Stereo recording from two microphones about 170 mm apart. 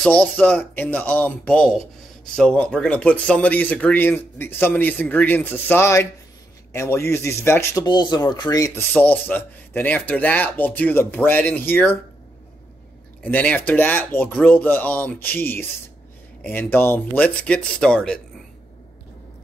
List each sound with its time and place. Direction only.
0.0 s speech: 5° left (ahead or behind)
13.2 s speech: 10° left (ahead or behind)